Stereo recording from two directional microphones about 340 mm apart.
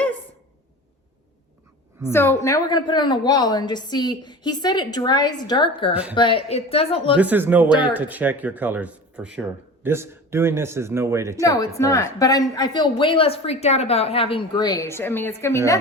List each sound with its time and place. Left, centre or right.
2.0 s a woman's voice: centre
5.9 s speech: centre
6.1 s a woman's voice: centre
7.2 s speech: centre
11.3 s a woman's voice: centre